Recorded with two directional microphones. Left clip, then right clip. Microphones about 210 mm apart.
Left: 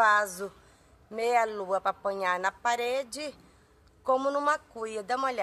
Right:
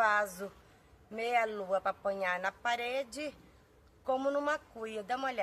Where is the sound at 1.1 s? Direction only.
40° left (ahead or behind).